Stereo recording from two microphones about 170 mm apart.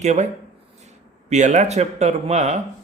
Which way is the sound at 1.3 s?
45° right (ahead or behind).